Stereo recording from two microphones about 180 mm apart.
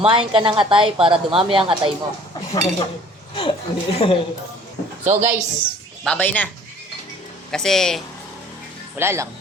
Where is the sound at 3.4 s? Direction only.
30° left (ahead or behind).